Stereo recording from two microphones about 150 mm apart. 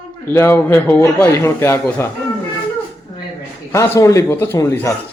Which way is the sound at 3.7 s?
20° left (ahead or behind).